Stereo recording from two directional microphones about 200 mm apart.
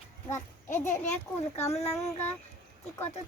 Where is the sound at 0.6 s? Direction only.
10° left (ahead or behind).